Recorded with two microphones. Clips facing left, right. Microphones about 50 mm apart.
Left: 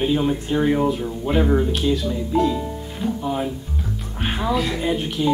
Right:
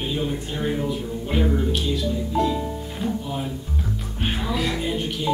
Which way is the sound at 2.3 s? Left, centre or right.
Centre.